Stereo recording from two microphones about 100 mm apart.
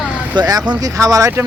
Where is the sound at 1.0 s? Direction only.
30° right (ahead or behind).